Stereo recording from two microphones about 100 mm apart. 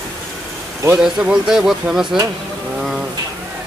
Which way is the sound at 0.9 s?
10° right (ahead or behind).